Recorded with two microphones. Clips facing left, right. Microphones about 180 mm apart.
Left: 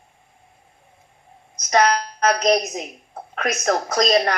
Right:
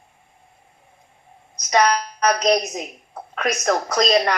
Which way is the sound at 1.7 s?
50° left (ahead or behind).